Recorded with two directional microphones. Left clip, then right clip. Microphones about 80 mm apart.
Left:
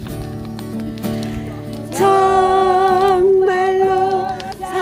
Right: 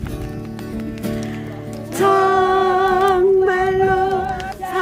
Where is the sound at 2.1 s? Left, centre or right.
Right.